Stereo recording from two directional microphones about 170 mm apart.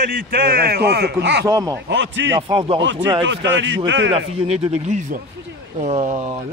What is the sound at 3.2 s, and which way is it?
Speech, 90° right.